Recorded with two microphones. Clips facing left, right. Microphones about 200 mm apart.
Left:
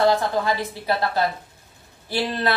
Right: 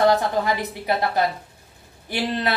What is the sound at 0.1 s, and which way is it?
Speech, 20° right (ahead or behind).